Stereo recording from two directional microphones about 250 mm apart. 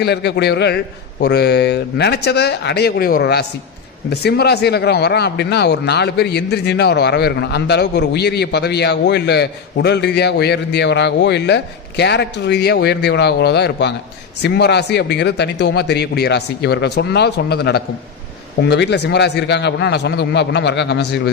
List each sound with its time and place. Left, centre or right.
0.0 s a man's voice: left